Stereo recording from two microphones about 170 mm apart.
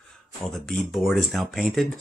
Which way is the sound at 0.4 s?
Centre (ahead or behind).